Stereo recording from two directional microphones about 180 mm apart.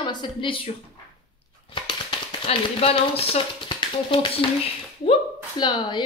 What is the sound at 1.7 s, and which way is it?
Speech, 30° left (ahead or behind).